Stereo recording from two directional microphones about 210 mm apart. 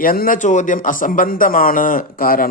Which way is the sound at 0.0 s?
45° left (ahead or behind).